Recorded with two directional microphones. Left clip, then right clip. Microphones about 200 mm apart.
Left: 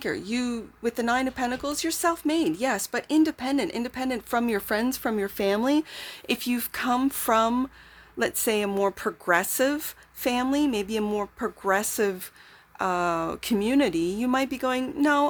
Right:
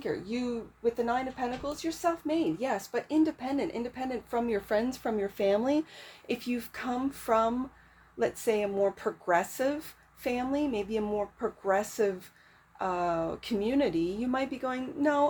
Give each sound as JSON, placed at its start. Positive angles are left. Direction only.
{"t": 0.0, "sound": "speech", "side_deg": 45}